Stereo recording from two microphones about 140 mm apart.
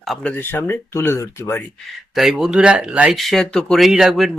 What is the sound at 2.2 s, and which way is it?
Speech, 5° right (ahead or behind).